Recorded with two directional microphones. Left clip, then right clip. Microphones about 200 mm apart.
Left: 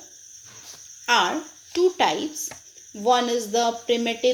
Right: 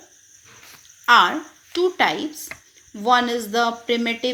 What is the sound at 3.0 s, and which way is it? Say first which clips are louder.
Speech: right 2 dB; 30° right (ahead or behind).